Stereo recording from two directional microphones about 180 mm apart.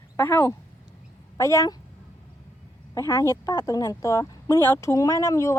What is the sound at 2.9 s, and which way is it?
Speech, 15° left (ahead or behind).